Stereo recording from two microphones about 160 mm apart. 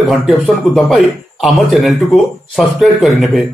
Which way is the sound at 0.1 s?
Centre (ahead or behind).